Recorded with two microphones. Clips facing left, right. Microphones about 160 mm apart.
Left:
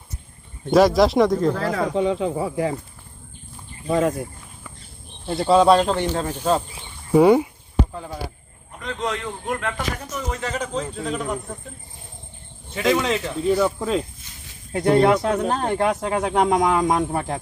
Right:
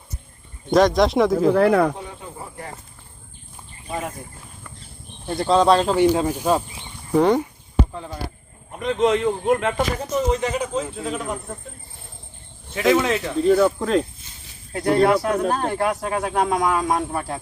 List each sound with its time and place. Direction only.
0.7 s speech: 5° left (ahead or behind)
1.5 s speech: 65° right (ahead or behind)
2.0 s speech: 90° left
3.8 s speech: 90° left
5.4 s speech: 5° left (ahead or behind)
7.1 s speech: 10° left (ahead or behind)
8.7 s a man's voice: 20° right (ahead or behind); by 11.5 s 5° right (ahead or behind)
12.7 s speech: 5° right (ahead or behind)
14.7 s speech: 20° left (ahead or behind)